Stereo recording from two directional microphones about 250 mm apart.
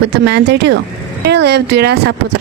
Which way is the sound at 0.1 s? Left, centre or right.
Right.